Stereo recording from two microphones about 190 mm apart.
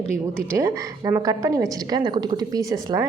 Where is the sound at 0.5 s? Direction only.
15° right (ahead or behind).